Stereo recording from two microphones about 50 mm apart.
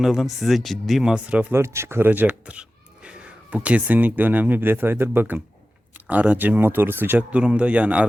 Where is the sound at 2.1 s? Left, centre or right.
Right.